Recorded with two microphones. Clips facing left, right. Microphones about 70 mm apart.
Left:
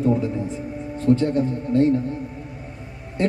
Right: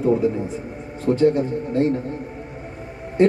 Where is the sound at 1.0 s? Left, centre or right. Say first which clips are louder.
Right 2 dB; centre.